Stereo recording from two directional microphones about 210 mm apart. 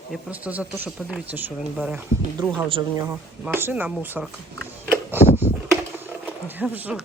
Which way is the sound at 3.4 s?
10° right (ahead or behind).